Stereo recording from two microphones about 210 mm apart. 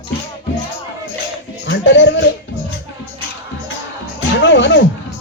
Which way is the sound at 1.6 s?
60° left (ahead or behind).